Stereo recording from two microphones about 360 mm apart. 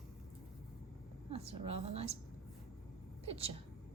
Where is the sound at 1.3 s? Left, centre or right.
Centre.